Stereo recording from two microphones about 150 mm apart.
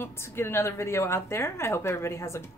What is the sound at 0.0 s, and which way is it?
A woman's voice, 15° left (ahead or behind).